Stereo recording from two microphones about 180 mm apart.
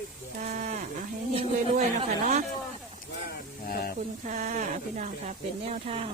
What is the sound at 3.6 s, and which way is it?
Snake, 55° left (ahead or behind).